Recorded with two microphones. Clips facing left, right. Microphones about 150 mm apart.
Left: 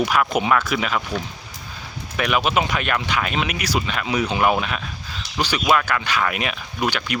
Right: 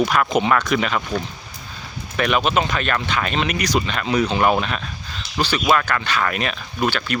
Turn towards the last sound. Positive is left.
turn(degrees=10)  # may be behind; listen again after turning